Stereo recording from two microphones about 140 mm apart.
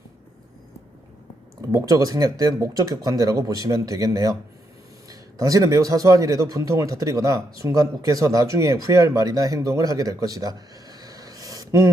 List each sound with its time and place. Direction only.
1.6 s speech: 25° right (ahead or behind)